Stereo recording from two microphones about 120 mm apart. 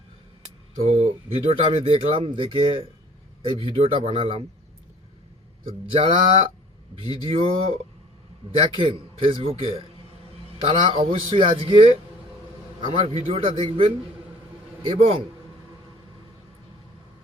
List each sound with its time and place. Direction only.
0.8 s speech: 60° right (ahead or behind)
5.6 s a man's voice: 50° right (ahead or behind)